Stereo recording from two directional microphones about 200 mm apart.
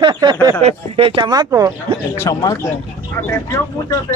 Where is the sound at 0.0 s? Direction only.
20° right (ahead or behind).